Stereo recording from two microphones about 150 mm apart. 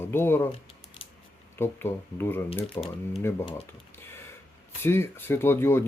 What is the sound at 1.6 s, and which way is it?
Speech, 15° left (ahead or behind).